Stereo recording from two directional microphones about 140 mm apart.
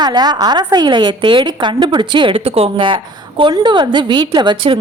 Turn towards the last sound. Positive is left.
turn(degrees=-35)  # may be behind; listen again after turning